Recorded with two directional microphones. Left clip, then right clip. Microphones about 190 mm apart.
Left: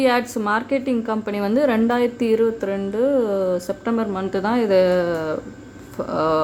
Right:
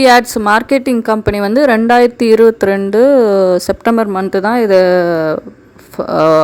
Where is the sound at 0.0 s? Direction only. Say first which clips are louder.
Right 11 dB; 50° right (ahead or behind).